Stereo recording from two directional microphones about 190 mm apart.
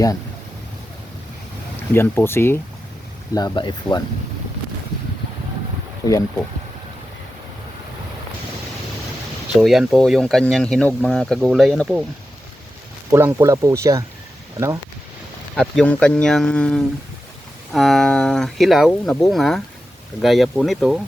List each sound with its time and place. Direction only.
1.9 s speech: 10° left (ahead or behind)
3.3 s speech: 25° left (ahead or behind)
9.6 s speech: centre (ahead or behind)
13.1 s speech: 15° right (ahead or behind)
15.5 s speech: centre (ahead or behind)